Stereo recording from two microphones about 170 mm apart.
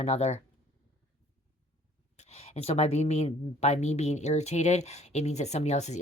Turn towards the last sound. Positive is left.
turn(degrees=40)  # may be behind; listen again after turning